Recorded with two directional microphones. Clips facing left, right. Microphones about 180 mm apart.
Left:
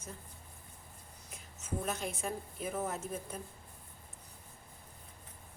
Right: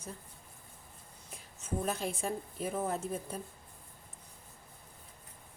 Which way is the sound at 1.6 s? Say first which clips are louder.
Right 3 dB; 30° right (ahead or behind).